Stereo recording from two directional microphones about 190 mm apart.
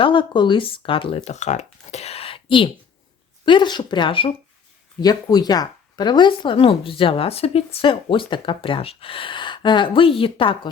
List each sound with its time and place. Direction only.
0.0 s speech: 25° left (ahead or behind)